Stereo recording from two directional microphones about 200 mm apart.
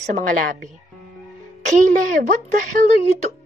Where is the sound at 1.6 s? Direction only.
40° right (ahead or behind).